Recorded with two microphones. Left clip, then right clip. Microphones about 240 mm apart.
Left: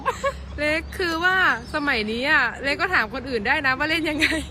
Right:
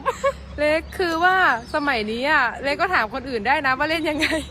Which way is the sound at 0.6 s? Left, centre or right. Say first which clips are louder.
Right 3 dB; centre.